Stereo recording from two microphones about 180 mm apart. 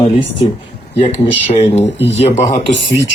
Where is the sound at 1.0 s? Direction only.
35° left (ahead or behind).